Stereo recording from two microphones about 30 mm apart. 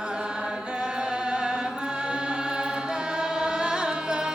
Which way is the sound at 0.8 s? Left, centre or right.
Right.